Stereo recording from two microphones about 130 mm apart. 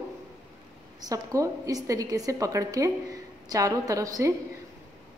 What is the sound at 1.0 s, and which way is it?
A woman's voice, 25° right (ahead or behind).